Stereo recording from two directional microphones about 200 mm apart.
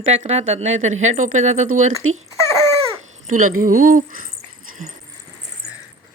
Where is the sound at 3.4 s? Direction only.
90° right.